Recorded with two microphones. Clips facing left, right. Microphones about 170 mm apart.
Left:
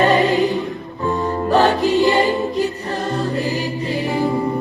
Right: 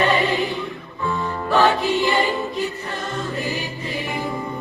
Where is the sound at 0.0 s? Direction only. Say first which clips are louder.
Left 5 dB; 40° left (ahead or behind).